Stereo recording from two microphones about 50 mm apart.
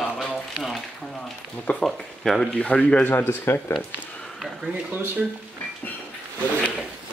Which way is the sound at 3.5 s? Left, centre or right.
Left.